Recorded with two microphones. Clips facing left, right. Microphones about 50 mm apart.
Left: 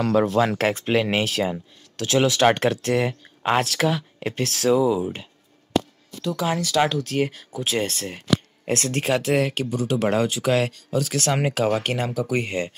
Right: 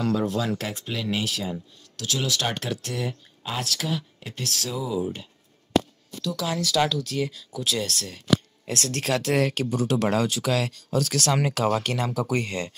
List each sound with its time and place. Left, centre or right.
0.0 s speech: left
2.0 s speech: left
2.6 s speech: left
6.2 s speech: left
6.9 s speech: left
8.9 s speech: centre
10.0 s speech: left
10.9 s speech: centre
12.1 s speech: centre